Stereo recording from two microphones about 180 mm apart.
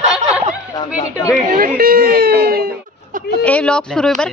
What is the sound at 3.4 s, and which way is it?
Speech, 5° left (ahead or behind).